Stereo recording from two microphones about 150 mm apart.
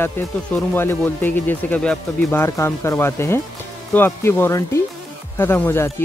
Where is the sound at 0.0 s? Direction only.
10° left (ahead or behind).